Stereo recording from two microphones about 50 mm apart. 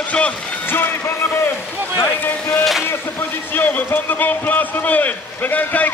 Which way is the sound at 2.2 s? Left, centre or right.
Left.